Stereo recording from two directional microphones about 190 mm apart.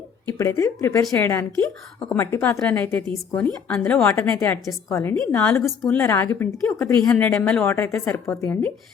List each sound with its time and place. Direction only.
0.3 s a woman's voice: 15° left (ahead or behind)
5.1 s a woman's voice: 5° left (ahead or behind)